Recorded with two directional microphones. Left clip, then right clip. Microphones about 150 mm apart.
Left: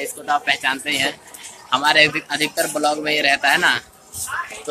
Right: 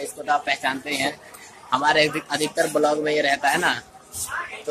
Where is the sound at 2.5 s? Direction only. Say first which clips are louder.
Right 2 dB; 25° right (ahead or behind).